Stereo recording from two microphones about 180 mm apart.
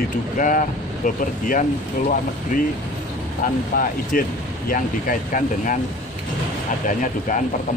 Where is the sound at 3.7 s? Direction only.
50° left (ahead or behind).